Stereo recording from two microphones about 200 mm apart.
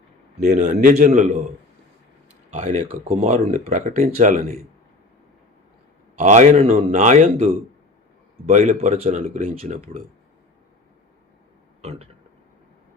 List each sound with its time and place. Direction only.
0.3 s speech: 35° right (ahead or behind)
2.5 s speech: 35° right (ahead or behind)
6.1 s speech: 35° right (ahead or behind)
11.8 s speech: 30° right (ahead or behind)